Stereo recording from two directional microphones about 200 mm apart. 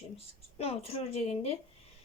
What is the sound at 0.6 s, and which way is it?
Speech, 30° left (ahead or behind).